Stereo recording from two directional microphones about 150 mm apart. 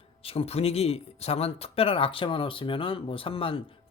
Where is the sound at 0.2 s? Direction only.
40° left (ahead or behind).